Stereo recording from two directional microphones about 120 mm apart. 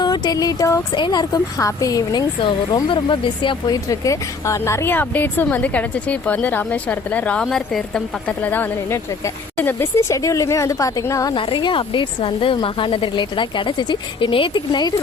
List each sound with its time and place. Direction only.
0.0 s a woman's voice: 35° left (ahead or behind)
2.4 s speech: 45° left (ahead or behind)
11.3 s speech: 45° left (ahead or behind)